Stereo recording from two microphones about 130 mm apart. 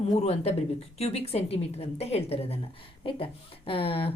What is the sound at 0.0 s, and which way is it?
A woman's voice, 55° left (ahead or behind).